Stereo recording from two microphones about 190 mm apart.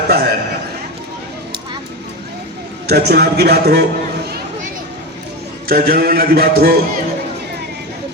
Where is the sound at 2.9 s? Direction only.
60° right (ahead or behind).